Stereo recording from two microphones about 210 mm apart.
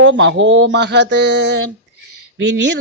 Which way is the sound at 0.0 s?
60° right (ahead or behind).